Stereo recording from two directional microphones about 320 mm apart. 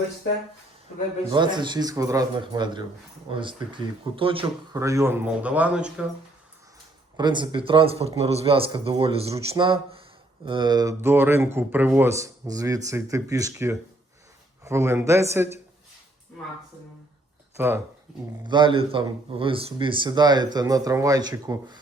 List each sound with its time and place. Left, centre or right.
1.3 s speech: centre
7.2 s speech: centre
17.6 s speech: centre
18.4 s speech: centre